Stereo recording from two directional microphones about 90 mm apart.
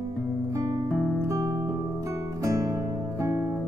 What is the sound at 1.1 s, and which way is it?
Guitar, 35° right (ahead or behind).